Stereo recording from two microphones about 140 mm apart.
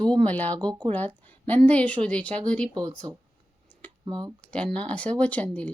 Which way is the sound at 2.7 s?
30° right (ahead or behind).